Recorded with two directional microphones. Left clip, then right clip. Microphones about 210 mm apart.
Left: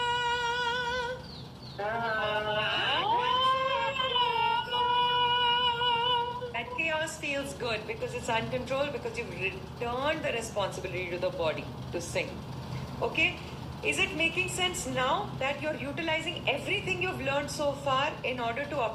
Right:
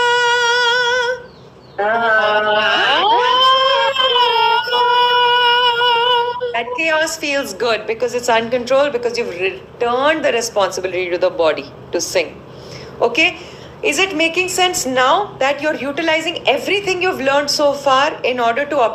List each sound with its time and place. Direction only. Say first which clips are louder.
0.0 s humming: right 15 dB; 45° right (ahead or behind)
1.8 s fire alarm: right 17 dB; 45° right (ahead or behind)
13.0 s a woman's voice: right 14 dB; 45° right (ahead or behind)